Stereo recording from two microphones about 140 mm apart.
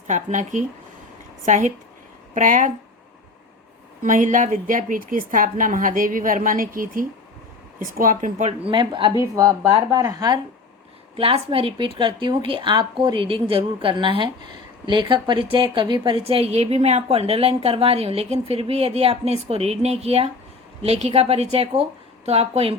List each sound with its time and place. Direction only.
0.1 s a woman's voice: 65° right (ahead or behind)
4.0 s a woman's voice: 65° right (ahead or behind)
8.6 s speech: 35° right (ahead or behind)
11.2 s a woman's voice: 40° right (ahead or behind)